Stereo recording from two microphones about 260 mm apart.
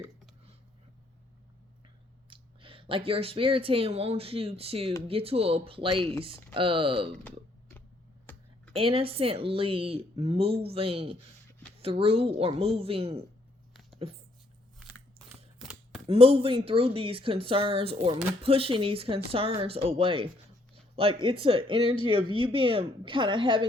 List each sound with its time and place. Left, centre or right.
2.3 s speech: centre
8.3 s a sound: centre
8.7 s speech: right
15.2 s a sound: centre
15.6 s chopping: centre
16.0 s speech: right